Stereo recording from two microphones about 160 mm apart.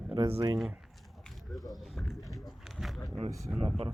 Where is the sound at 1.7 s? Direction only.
Centre (ahead or behind).